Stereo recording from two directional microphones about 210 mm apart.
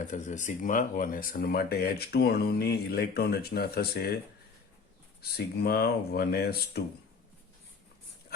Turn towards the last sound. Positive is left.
turn(degrees=50)  # may be behind; listen again after turning